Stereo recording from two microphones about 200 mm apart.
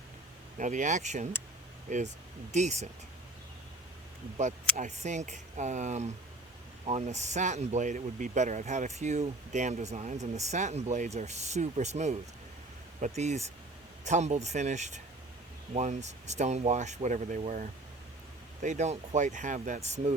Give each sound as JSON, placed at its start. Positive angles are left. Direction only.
{"t": 0.6, "sound": "speech", "side_deg": -40}
{"t": 4.4, "sound": "speech", "side_deg": -35}